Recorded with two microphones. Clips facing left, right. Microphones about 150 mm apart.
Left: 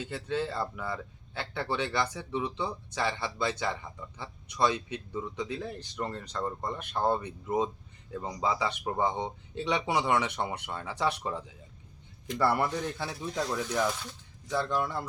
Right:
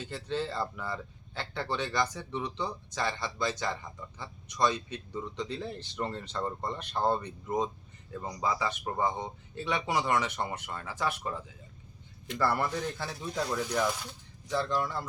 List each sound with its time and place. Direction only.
0.0 s a man's voice: 10° left (ahead or behind)
0.6 s speech: centre (ahead or behind)
1.6 s a man's voice: 10° left (ahead or behind)
6.9 s a man's voice: 10° left (ahead or behind)
12.4 s a man's voice: 15° left (ahead or behind)
13.2 s speech: centre (ahead or behind)
14.7 s a man's voice: 15° left (ahead or behind)